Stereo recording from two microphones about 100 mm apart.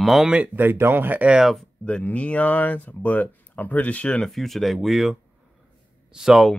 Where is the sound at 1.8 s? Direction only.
15° left (ahead or behind); by 6.6 s centre (ahead or behind).